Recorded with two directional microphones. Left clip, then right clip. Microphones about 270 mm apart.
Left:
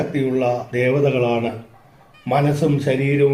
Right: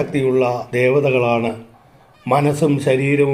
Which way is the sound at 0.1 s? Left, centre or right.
Right.